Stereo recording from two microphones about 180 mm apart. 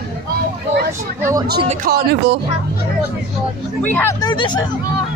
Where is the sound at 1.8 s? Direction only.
65° right (ahead or behind).